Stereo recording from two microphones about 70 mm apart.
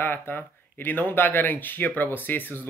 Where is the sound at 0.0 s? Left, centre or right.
Left.